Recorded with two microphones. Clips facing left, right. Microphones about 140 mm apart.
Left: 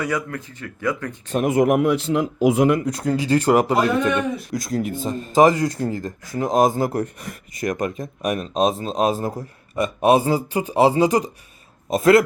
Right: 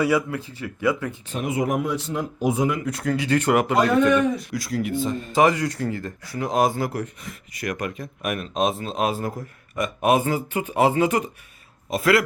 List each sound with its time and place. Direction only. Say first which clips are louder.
0.0 s speech: right 4 dB; 10° right (ahead or behind)
1.3 s speech: left 7 dB; 50° left (ahead or behind); by 2.7 s 85° left
2.7 s speech: left 3 dB; 35° left (ahead or behind)